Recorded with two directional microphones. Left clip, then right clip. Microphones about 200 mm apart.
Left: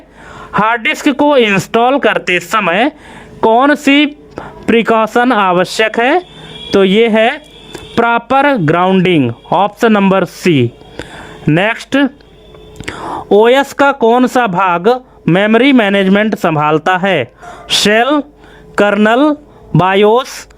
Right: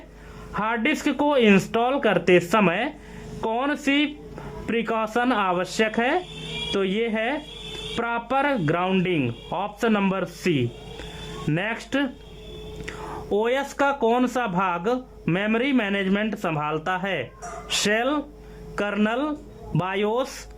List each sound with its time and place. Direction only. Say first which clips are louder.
0.5 s speech: left 12 dB; 50° left (ahead or behind)